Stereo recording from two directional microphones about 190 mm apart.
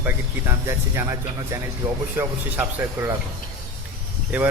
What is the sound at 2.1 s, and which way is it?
Speech, 10° right (ahead or behind).